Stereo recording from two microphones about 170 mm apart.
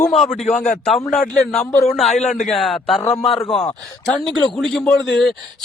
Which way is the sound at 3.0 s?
40° left (ahead or behind).